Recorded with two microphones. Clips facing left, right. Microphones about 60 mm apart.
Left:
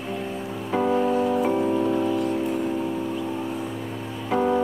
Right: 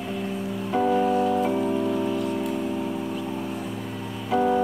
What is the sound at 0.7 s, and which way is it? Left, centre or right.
Music, centre.